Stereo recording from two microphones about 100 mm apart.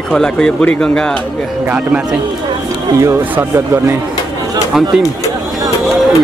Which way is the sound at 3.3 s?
25° right (ahead or behind).